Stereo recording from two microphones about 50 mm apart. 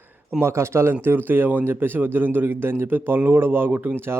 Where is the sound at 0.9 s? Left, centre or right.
Right.